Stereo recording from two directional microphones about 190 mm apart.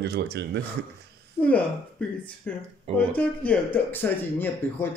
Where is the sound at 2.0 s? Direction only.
5° left (ahead or behind).